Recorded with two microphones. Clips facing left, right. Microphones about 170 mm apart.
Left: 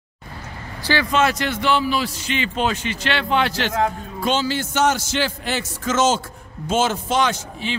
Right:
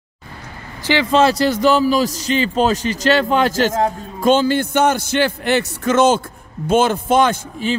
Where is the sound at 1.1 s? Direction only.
30° right (ahead or behind); by 7.8 s 45° right (ahead or behind).